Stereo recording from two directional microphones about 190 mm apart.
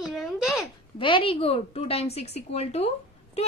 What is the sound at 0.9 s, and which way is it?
A woman's voice, 25° left (ahead or behind).